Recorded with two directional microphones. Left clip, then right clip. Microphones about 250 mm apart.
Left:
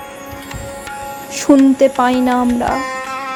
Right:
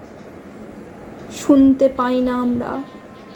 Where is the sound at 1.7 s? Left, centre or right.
Left.